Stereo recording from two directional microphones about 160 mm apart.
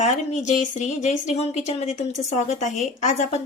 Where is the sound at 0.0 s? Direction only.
45° left (ahead or behind).